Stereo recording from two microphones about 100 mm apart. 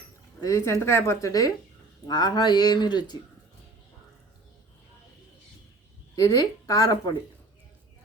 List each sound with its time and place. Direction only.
0.4 s speech: 30° left (ahead or behind)
6.1 s speech: 35° left (ahead or behind)